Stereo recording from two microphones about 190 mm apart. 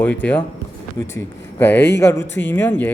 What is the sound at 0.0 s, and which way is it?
Speech, 10° left (ahead or behind).